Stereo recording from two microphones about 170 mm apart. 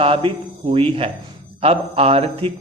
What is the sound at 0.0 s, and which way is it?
A man's voice, 35° right (ahead or behind).